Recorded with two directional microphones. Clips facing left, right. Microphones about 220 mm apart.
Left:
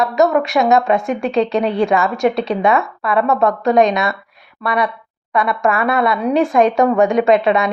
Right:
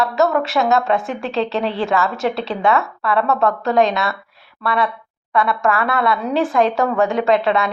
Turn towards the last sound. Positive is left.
turn(degrees=20)  # may be behind; listen again after turning